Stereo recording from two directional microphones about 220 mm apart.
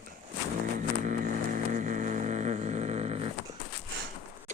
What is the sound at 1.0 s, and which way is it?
Vehicle, 40° right (ahead or behind).